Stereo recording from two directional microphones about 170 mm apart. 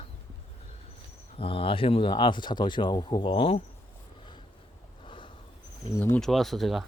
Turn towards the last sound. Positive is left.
turn(degrees=0)  # may be behind; listen again after turning